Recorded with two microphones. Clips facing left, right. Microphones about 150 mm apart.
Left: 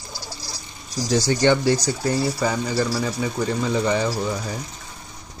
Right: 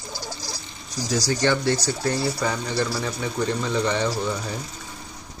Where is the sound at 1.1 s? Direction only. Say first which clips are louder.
Left 4 dB; 25° left (ahead or behind).